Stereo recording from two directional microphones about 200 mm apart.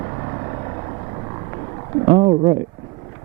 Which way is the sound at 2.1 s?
25° right (ahead or behind).